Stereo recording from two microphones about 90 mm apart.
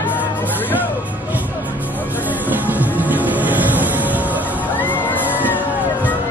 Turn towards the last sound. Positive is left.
turn(degrees=-20)  # may be behind; listen again after turning